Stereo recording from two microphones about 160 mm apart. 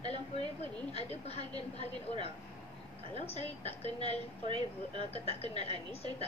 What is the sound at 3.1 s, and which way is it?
A woman's voice, 40° left (ahead or behind).